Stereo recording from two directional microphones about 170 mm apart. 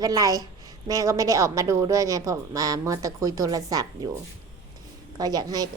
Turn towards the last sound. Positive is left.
turn(degrees=-20)  # may be behind; listen again after turning